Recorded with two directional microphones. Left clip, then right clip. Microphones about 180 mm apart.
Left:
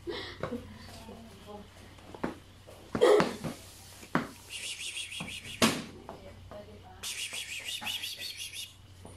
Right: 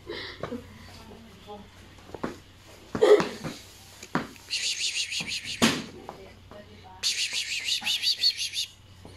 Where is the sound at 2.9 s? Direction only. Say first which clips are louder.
Right 2 dB; 35° right (ahead or behind).